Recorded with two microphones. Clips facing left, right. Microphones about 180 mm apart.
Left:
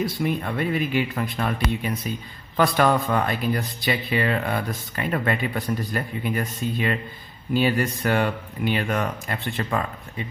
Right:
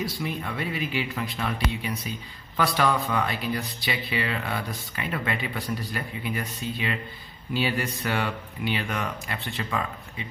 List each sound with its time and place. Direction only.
0.0 s speech: 55° left (ahead or behind)